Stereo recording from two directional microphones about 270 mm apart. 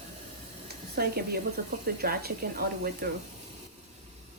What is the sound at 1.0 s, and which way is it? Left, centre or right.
Speech, right.